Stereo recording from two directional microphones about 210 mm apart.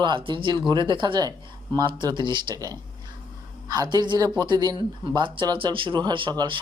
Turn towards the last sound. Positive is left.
turn(degrees=-25)  # may be behind; listen again after turning